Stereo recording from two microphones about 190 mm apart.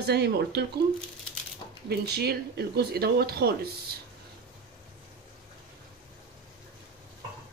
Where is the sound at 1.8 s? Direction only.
60° right (ahead or behind).